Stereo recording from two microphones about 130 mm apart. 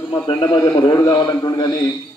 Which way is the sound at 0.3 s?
35° left (ahead or behind).